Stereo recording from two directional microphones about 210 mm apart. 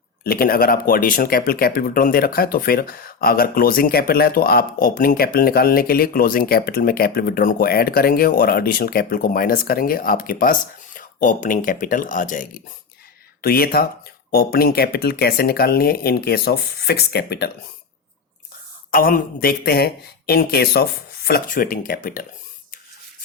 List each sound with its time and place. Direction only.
0.3 s speech: 45° left (ahead or behind)
18.9 s speech: 45° left (ahead or behind)